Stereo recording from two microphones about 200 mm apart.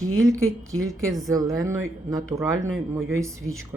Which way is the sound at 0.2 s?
15° right (ahead or behind).